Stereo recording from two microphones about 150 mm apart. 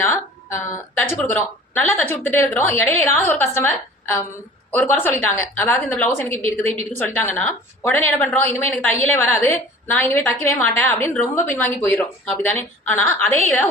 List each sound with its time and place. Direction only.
0.6 s a woman's voice: 15° left (ahead or behind)